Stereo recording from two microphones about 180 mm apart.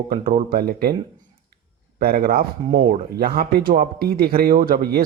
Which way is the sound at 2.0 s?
55° right (ahead or behind).